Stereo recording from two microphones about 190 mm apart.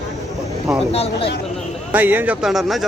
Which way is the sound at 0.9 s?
30° left (ahead or behind).